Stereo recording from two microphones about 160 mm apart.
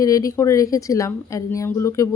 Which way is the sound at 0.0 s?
20° left (ahead or behind).